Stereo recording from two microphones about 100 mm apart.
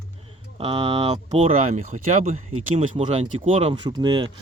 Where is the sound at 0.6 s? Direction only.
60° right (ahead or behind).